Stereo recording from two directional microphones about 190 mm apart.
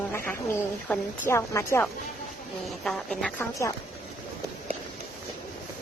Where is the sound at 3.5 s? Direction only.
15° left (ahead or behind).